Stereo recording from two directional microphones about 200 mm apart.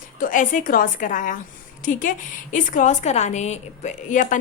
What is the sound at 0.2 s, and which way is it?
A woman's voice, 40° left (ahead or behind).